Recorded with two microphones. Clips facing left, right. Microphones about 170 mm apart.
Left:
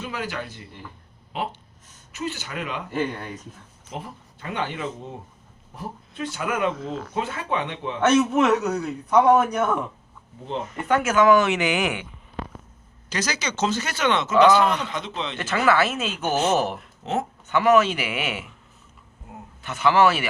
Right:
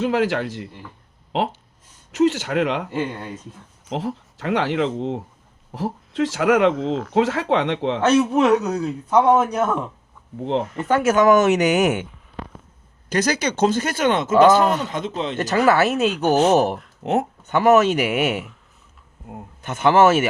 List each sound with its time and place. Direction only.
0.0 s speech: 90° right
2.1 s speech: 90° right
2.9 s a man's voice: 25° right (ahead or behind)
3.8 s speech: 90° right
5.7 s speech: 90° right
8.3 s speech: 15° right (ahead or behind)
8.7 s a man's voice: 25° right (ahead or behind)
10.8 s speech: 35° right (ahead or behind)
13.1 s speech: 55° right (ahead or behind)
17.0 s speech: 60° right (ahead or behind)
17.5 s speech: 40° right (ahead or behind)